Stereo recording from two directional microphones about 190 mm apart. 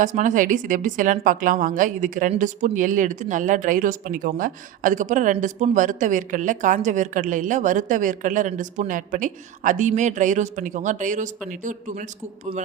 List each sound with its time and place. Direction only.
0.0 s a woman's voice: 40° right (ahead or behind)